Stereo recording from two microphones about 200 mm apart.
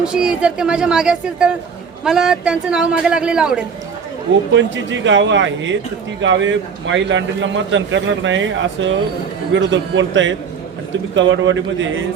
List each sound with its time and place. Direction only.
0.0 s a woman's voice: 5° right (ahead or behind)
4.5 s a man's voice: 65° right (ahead or behind)